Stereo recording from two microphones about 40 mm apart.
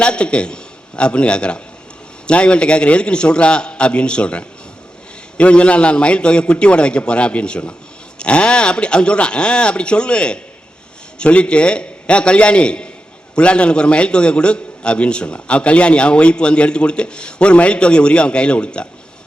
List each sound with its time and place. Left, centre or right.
0.0 s a man's voice: left